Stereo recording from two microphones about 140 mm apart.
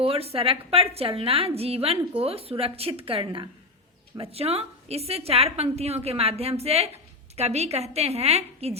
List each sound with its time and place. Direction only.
0.0 s a woman's voice: 45° right (ahead or behind)